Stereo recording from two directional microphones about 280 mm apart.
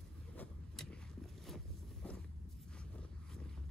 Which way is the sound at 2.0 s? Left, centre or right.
Centre.